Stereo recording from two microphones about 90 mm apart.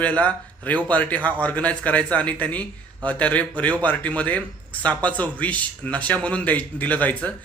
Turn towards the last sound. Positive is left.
turn(degrees=15)  # may be behind; listen again after turning